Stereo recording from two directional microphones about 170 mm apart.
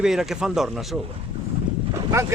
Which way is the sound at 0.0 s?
5° right (ahead or behind).